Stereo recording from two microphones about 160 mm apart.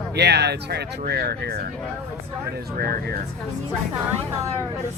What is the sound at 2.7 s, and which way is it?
Speech, 75° right (ahead or behind).